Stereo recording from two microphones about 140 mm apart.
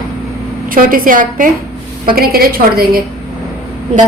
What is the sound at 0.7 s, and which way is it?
Speech, 85° right.